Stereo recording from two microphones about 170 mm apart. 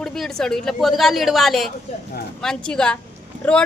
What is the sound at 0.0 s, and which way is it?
Speech, 5° left (ahead or behind).